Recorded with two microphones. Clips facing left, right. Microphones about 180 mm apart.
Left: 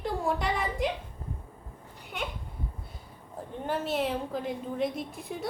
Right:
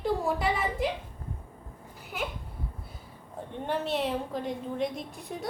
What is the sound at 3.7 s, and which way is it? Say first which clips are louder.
A woman's voice: even; centre (ahead or behind).